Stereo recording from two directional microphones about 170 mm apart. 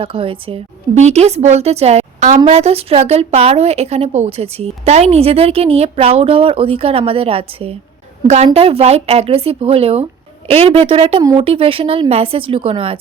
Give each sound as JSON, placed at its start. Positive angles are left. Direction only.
{"t": 0.0, "sound": "speech", "side_deg": -30}